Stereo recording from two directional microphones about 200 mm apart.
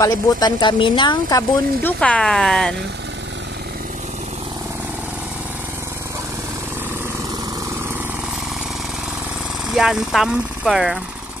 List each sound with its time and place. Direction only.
0.0 s speech: 20° left (ahead or behind)
1.8 s speech: 10° left (ahead or behind)
9.7 s speech: centre (ahead or behind)